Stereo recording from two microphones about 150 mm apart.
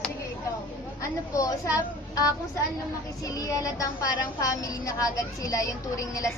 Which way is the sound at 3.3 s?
20° left (ahead or behind).